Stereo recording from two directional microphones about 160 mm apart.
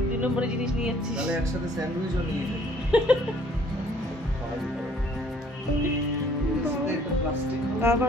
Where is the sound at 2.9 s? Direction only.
5° right (ahead or behind).